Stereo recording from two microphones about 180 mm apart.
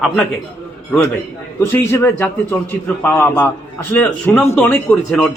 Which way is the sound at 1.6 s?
10° left (ahead or behind).